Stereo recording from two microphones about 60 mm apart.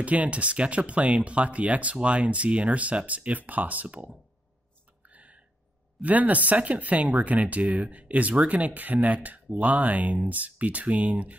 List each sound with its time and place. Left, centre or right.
0.0 s speech: right
5.0 s a sound: right
5.9 s speech: right